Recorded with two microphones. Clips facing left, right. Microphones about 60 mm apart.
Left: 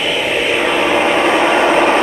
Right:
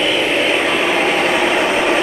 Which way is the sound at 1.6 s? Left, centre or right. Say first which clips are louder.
Left 4 dB; left.